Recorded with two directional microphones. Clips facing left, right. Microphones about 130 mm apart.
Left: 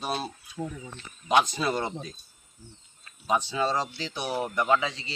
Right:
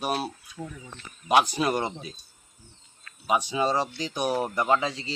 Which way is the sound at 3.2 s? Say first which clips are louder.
Right 2 dB; 10° right (ahead or behind).